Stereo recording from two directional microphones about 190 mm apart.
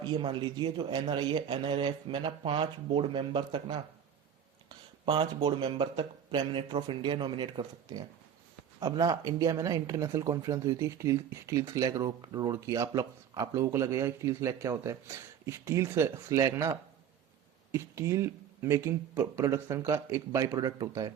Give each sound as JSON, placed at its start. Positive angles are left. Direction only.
{"t": 0.0, "sound": "speech", "side_deg": -25}
{"t": 5.0, "sound": "speech", "side_deg": -25}
{"t": 17.7, "sound": "speech", "side_deg": -15}